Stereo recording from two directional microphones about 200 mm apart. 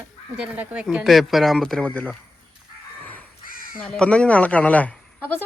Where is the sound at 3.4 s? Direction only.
45° left (ahead or behind).